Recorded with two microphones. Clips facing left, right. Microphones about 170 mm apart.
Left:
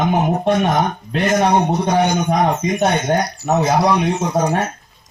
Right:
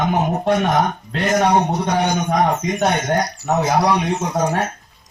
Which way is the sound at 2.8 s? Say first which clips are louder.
Left 2 dB; 20° left (ahead or behind).